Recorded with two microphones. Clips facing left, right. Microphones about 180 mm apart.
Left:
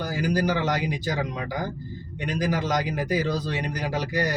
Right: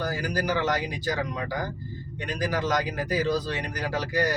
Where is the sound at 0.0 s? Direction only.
20° left (ahead or behind).